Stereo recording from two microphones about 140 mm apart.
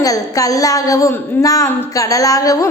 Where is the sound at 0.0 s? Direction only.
25° left (ahead or behind).